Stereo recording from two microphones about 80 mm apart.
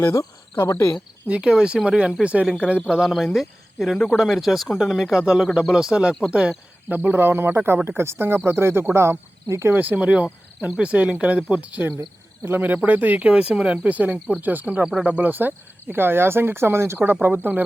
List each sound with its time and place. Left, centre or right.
0.0 s cricket: left
1.3 s cricket: centre
3.3 s speech: centre
5.2 s cricket: centre
6.8 s speech: right
9.7 s cricket: centre
12.5 s speech: right